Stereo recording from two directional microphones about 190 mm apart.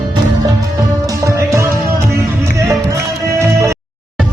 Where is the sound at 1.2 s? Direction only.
15° right (ahead or behind).